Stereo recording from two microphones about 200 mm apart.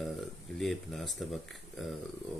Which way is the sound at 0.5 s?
Centre (ahead or behind).